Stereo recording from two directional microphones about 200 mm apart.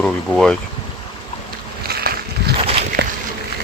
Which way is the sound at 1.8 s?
50° right (ahead or behind).